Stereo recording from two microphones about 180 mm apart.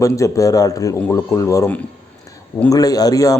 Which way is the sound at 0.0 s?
20° left (ahead or behind).